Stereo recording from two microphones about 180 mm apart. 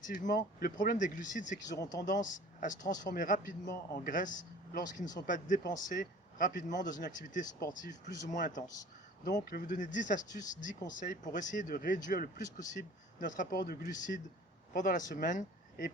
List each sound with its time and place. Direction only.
0.1 s speech: 50° left (ahead or behind)
1.8 s speech: 20° left (ahead or behind)
2.0 s speech: 45° left (ahead or behind)